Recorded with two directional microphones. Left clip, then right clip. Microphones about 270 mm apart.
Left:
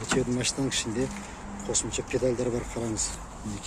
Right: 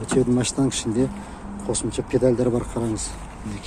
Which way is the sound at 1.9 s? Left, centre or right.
Centre.